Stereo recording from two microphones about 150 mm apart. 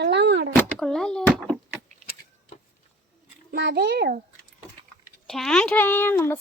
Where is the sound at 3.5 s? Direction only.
90° right.